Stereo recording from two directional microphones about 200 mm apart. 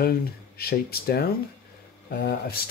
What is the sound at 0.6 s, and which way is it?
Speech, 50° left (ahead or behind).